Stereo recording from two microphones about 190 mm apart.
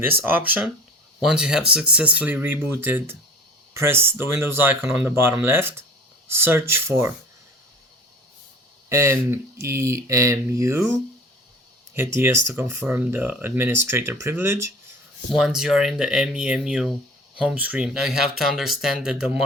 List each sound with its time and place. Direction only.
0.3 s speech: 10° right (ahead or behind)
8.9 s speech: 15° right (ahead or behind)
15.3 s speech: centre (ahead or behind)